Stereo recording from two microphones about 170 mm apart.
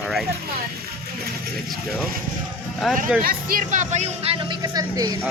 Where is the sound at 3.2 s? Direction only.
50° right (ahead or behind); by 5.2 s 20° right (ahead or behind).